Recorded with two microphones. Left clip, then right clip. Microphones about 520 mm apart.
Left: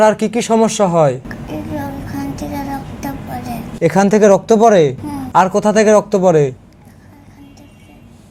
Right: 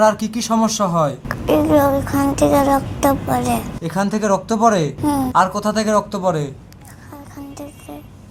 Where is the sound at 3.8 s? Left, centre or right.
Left.